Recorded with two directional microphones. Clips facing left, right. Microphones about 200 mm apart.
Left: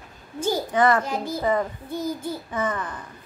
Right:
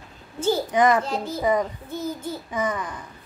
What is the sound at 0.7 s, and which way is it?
Speech, 15° right (ahead or behind).